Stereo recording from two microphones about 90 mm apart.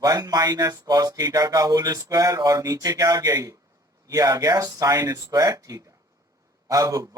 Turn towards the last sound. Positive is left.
turn(degrees=-40)  # may be behind; listen again after turning